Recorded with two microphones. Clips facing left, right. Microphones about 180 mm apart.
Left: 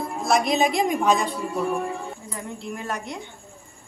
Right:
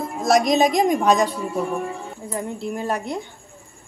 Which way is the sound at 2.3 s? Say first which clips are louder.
Right 10 dB; 30° right (ahead or behind).